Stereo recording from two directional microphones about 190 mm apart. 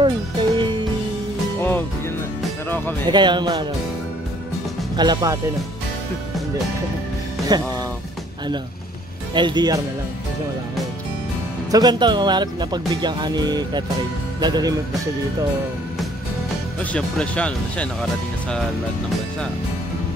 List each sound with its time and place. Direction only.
0.0 s music: 25° right (ahead or behind)
1.6 s music: 10° left (ahead or behind)
3.1 s speech: 25° right (ahead or behind)
4.9 s speech: 20° right (ahead or behind)
7.5 s speech: 20° right (ahead or behind)
9.3 s speech: 25° right (ahead or behind)
11.7 s speech: 20° right (ahead or behind)
16.9 s speech: 5° left (ahead or behind)